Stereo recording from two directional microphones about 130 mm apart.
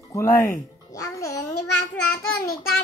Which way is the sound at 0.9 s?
25° left (ahead or behind).